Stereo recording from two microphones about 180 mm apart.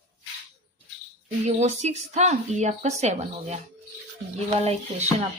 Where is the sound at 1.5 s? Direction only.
40° right (ahead or behind).